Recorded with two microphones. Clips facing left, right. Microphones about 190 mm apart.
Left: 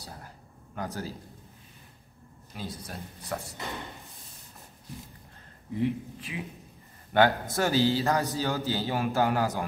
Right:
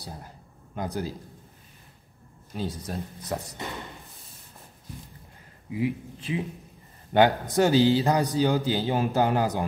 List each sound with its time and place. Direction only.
0.7 s a man's voice: 15° right (ahead or behind)
2.5 s speech: 25° right (ahead or behind)
5.7 s a man's voice: 10° right (ahead or behind)
6.3 s speech: 30° right (ahead or behind)
7.1 s a man's voice: 15° right (ahead or behind)